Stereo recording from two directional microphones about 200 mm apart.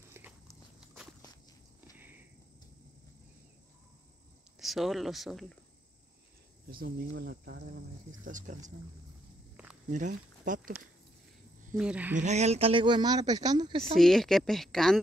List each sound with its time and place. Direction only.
0.2 s biting: 10° right (ahead or behind)
2.0 s a sound: 10° right (ahead or behind)
4.6 s speech: centre (ahead or behind)
6.7 s speech: 45° right (ahead or behind)
8.3 s speech: 40° right (ahead or behind)
9.8 s speech: 40° right (ahead or behind)
11.7 s speech: 5° right (ahead or behind)
12.2 s speech: 35° right (ahead or behind)
13.9 s speech: centre (ahead or behind)